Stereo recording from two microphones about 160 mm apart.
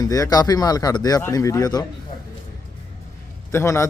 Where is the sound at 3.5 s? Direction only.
15° left (ahead or behind).